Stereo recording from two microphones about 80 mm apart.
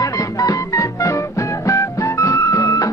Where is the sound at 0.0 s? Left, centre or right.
Left.